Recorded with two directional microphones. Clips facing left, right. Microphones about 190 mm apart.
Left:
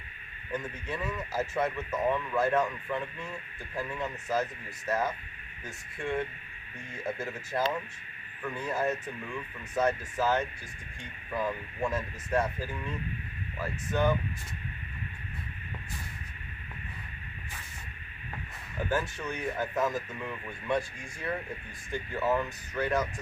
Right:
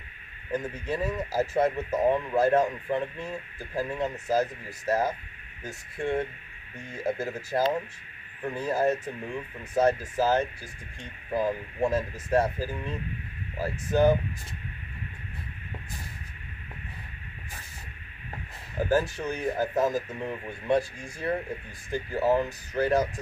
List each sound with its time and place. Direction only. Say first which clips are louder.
0.5 s speech: right 5 dB; 35° right (ahead or behind)
18.8 s speech: right 6 dB; 35° right (ahead or behind)